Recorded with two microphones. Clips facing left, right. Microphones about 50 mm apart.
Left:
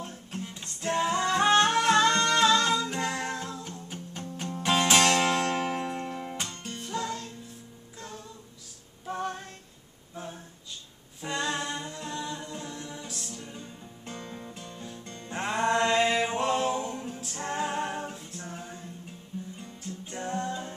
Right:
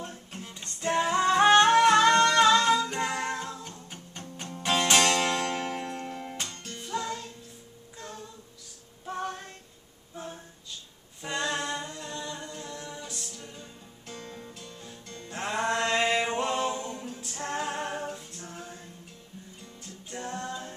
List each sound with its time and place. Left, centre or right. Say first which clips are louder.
0.0 s music: left 2 dB; centre
1.1 s music: right 4 dB; centre
6.8 s music: right 1 dB; centre
9.0 s female singing: left 1 dB; centre
11.1 s humming: even; centre
13.4 s music: left 2 dB; centre
15.5 s music: left 3 dB; centre
20.1 s music: left 3 dB; centre